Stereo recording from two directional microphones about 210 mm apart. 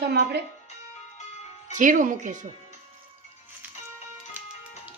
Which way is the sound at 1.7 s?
40° right (ahead or behind).